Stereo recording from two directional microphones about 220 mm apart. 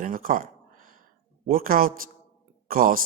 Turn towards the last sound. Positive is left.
turn(degrees=-40)  # may be behind; listen again after turning